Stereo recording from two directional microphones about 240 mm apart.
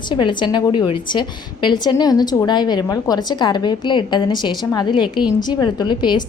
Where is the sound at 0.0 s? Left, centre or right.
Centre.